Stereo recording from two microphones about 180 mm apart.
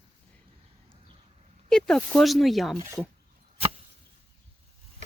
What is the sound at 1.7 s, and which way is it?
Speech, 5° left (ahead or behind).